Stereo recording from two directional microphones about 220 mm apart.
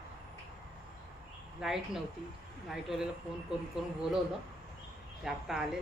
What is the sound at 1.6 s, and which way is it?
A woman's voice, centre (ahead or behind).